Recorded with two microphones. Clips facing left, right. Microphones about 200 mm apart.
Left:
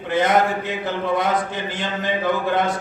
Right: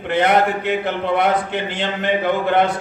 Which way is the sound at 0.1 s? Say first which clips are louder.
Right 2 dB; 65° right (ahead or behind).